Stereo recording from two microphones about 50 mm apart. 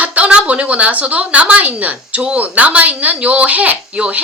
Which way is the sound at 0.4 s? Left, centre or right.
Right.